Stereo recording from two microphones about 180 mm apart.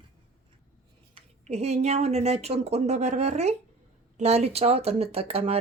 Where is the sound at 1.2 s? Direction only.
35° right (ahead or behind).